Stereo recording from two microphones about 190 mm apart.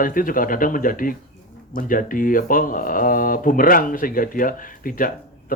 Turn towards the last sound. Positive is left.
turn(degrees=45)  # may be behind; listen again after turning